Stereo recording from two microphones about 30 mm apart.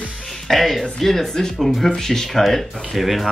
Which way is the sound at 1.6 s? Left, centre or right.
Centre.